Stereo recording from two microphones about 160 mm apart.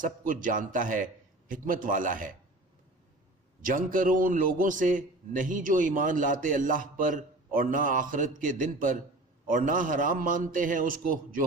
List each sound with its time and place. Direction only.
0.4 s a man's voice: 55° right (ahead or behind)
3.6 s a man's voice: 55° right (ahead or behind)